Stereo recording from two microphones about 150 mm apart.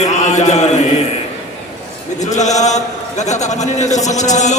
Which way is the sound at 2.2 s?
50° left (ahead or behind).